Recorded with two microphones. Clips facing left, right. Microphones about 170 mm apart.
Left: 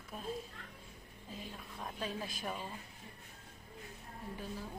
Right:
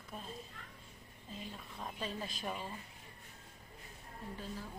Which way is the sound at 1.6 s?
Centre (ahead or behind).